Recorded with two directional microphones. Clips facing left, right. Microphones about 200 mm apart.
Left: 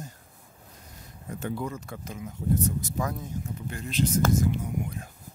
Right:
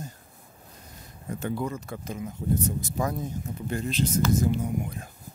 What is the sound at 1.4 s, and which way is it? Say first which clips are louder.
Speech: right 2 dB; 35° right (ahead or behind).